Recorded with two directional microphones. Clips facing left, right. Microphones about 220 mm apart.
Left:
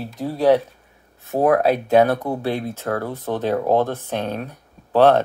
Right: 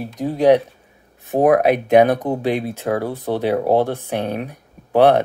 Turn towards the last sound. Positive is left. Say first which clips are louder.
# right 1 dB
turn(degrees=-15)  # may be behind; listen again after turning